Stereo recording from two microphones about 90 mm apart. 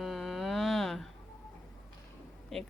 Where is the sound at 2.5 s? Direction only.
5° left (ahead or behind).